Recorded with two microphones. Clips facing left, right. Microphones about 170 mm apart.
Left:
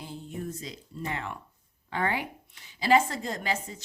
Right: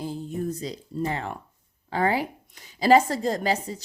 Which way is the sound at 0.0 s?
40° right (ahead or behind).